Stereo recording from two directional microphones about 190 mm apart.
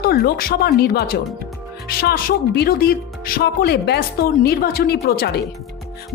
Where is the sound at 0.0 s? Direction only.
55° left (ahead or behind).